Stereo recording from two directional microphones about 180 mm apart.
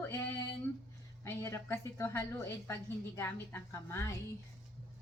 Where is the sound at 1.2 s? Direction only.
15° left (ahead or behind).